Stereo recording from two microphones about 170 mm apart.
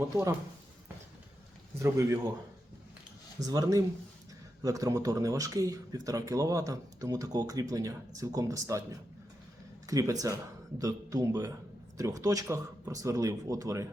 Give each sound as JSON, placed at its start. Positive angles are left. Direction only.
{"t": 1.8, "sound": "a man's voice", "side_deg": -20}
{"t": 3.4, "sound": "speech", "side_deg": -20}
{"t": 9.8, "sound": "speech", "side_deg": -20}